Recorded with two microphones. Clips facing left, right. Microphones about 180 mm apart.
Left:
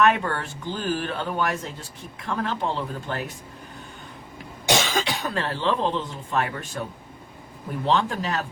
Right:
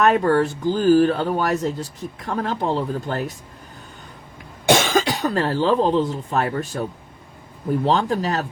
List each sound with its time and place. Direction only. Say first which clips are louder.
0.0 s speech: right 5 dB; 40° right (ahead or behind)
4.6 s speech: right 6 dB; 55° right (ahead or behind); by 6.8 s 40° right (ahead or behind)
7.9 s speech: right 1 dB; 40° right (ahead or behind)